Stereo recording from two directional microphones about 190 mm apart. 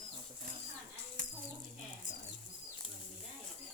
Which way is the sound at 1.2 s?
45° right (ahead or behind).